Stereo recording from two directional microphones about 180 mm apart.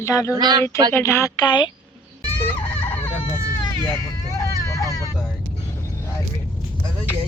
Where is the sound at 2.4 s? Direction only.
10° left (ahead or behind).